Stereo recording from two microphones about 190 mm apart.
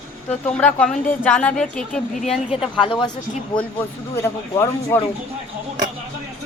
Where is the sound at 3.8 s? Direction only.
10° left (ahead or behind).